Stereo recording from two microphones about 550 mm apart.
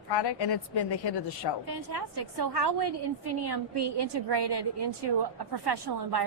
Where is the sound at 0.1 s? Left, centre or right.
Left.